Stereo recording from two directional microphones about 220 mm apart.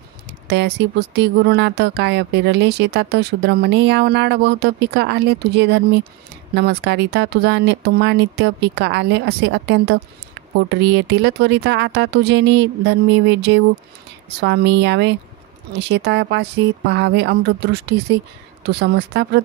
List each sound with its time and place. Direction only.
0.5 s speech: 50° right (ahead or behind)